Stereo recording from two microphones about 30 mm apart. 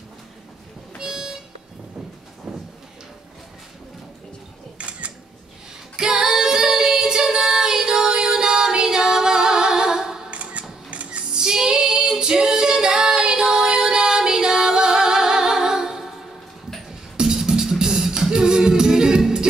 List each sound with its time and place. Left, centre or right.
0.9 s harmonica: centre
4.7 s camera: right
5.9 s female singing: right
8.8 s music: right
10.3 s a sound: right
11.3 s female singing: right
13.7 s music: right
16.0 s music: centre
17.2 s music: centre
18.3 s music: right